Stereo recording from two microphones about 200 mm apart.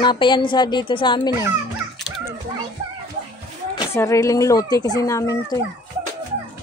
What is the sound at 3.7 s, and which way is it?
Speech, 15° left (ahead or behind).